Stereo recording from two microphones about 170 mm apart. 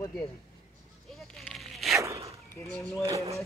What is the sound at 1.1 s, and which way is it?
Zipper, centre (ahead or behind).